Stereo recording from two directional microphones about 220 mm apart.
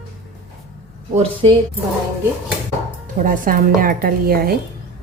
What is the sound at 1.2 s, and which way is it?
Speech, 25° right (ahead or behind).